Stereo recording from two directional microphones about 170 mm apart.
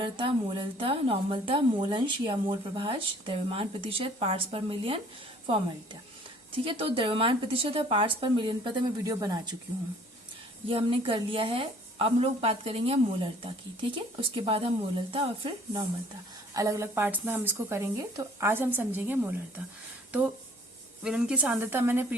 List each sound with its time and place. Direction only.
0.0 s a woman's voice: 30° right (ahead or behind)
6.7 s a woman's voice: 35° right (ahead or behind)
10.7 s a woman's voice: 30° right (ahead or behind)
16.6 s a woman's voice: 20° right (ahead or behind)
21.0 s a woman's voice: 5° right (ahead or behind)